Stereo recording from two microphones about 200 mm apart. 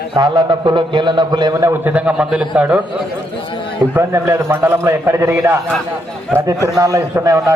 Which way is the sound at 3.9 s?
15° right (ahead or behind).